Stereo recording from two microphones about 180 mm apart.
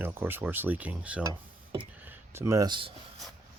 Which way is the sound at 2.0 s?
10° right (ahead or behind).